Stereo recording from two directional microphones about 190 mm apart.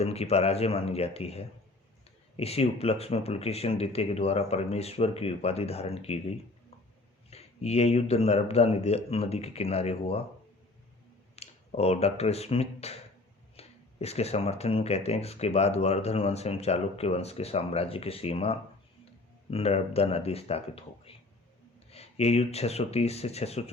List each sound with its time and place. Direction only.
0.0 s speech: 35° left (ahead or behind)
11.3 s speech: 35° left (ahead or behind)